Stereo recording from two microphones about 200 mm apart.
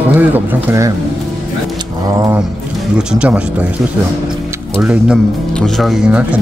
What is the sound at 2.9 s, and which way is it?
Speech, 5° right (ahead or behind).